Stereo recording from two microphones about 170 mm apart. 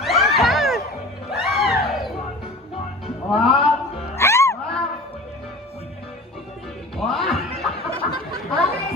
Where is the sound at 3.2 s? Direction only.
Centre (ahead or behind).